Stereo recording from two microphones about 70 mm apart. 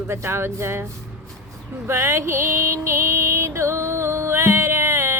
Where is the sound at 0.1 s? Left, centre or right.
Right.